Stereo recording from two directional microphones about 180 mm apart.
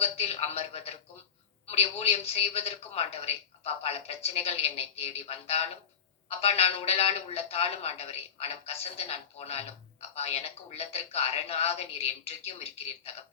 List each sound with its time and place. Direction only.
0.0 s a woman's voice: 35° left (ahead or behind)